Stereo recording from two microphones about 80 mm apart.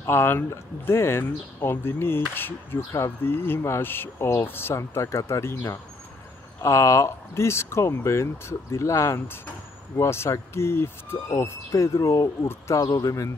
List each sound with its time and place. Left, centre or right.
0.0 s speech: left